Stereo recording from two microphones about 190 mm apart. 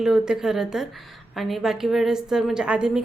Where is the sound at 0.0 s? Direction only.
Centre (ahead or behind).